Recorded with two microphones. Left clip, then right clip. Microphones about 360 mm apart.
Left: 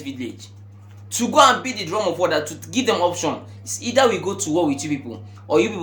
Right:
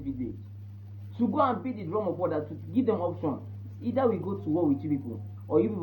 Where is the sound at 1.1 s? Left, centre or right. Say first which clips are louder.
Left 12 dB; left.